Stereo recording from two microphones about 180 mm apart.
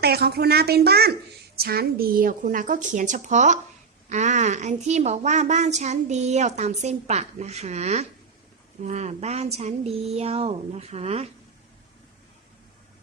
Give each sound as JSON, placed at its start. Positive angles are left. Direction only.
{"t": 0.0, "sound": "a woman's voice", "side_deg": -60}